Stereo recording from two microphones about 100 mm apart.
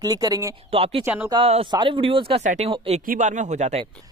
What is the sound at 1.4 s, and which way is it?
Speech, 65° right (ahead or behind).